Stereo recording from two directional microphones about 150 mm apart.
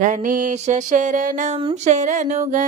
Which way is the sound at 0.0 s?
60° right (ahead or behind).